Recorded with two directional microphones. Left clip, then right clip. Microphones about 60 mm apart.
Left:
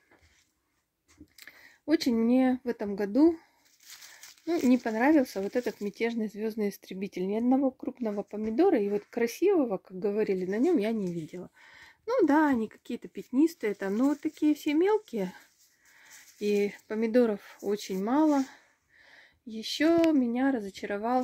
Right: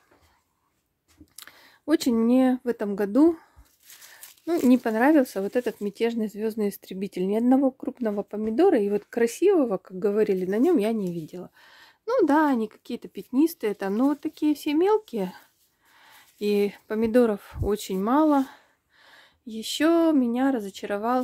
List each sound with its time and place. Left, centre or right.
1.3 s speech: right
5.5 s speech: right
5.8 s speech: right
7.0 s speech: right
8.0 s speech: right
10.9 s speech: right
11.2 s speech: centre
16.3 s speech: right
17.6 s speech: right
18.5 s a sound: right
20.4 s speech: right